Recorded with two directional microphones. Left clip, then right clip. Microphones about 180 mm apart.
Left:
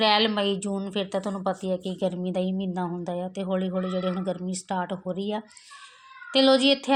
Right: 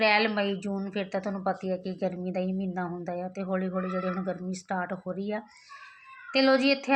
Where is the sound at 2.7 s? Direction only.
35° left (ahead or behind).